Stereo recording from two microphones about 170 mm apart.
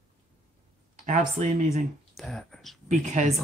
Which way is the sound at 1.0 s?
45° right (ahead or behind).